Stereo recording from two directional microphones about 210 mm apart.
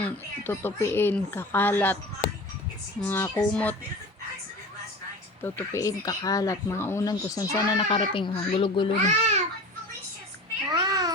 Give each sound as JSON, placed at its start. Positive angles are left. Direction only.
{"t": 0.0, "sound": "speech", "side_deg": 10}
{"t": 3.0, "sound": "speech", "side_deg": 10}
{"t": 5.4, "sound": "speech", "side_deg": 10}
{"t": 9.0, "sound": "a child's voice", "side_deg": -30}
{"t": 10.7, "sound": "cat", "side_deg": -20}